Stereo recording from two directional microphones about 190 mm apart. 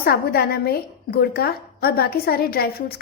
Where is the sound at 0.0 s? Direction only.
55° left (ahead or behind).